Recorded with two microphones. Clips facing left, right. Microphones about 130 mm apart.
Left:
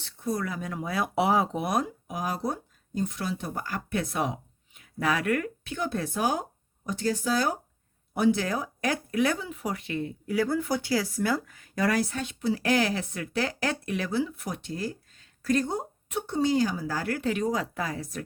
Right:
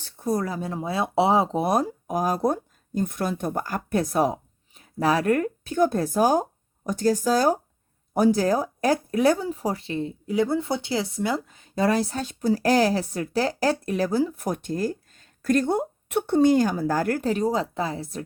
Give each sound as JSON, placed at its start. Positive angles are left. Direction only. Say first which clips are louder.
{"t": 0.0, "sound": "speech", "louder": "right 5 dB", "side_deg": -40}